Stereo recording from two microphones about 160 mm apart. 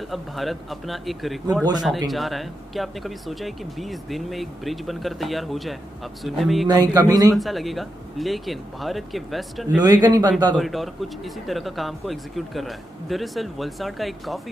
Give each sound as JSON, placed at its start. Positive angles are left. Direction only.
{"t": 0.1, "sound": "speech", "side_deg": 0}
{"t": 6.7, "sound": "speech", "side_deg": -25}
{"t": 7.3, "sound": "speech", "side_deg": 0}
{"t": 9.8, "sound": "speech", "side_deg": -25}
{"t": 10.5, "sound": "speech", "side_deg": 0}